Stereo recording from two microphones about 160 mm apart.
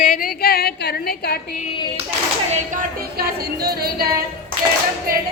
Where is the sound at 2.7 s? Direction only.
75° right (ahead or behind).